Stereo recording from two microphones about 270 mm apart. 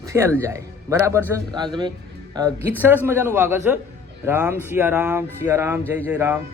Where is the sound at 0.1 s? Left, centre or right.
Centre.